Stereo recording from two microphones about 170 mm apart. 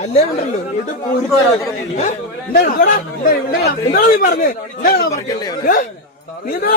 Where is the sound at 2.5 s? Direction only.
55° left (ahead or behind).